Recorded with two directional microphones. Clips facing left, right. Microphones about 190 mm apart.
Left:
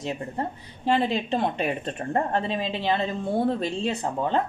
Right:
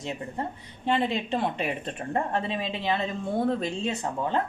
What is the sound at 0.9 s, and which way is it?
Speech, centre (ahead or behind).